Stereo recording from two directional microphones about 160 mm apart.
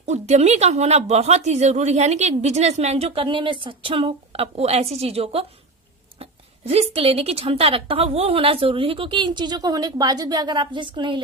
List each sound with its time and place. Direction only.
0.0 s speech: 45° right (ahead or behind)
6.7 s a woman's voice: 40° right (ahead or behind)